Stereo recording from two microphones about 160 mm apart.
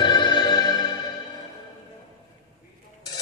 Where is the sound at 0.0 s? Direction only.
30° left (ahead or behind).